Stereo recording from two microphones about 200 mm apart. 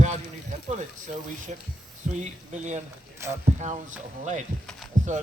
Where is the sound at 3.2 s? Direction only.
15° right (ahead or behind).